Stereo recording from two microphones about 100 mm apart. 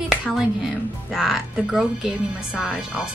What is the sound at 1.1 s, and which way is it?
Speech, 5° right (ahead or behind).